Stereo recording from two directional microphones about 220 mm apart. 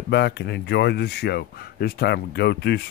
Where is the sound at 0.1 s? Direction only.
50° left (ahead or behind).